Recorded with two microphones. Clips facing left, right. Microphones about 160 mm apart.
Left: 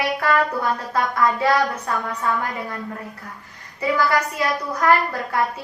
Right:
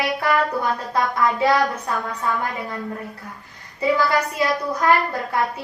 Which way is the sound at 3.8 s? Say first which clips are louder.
Right 1 dB; 25° right (ahead or behind).